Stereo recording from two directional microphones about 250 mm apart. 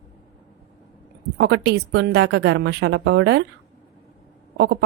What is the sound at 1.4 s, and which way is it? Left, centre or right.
Speech, right.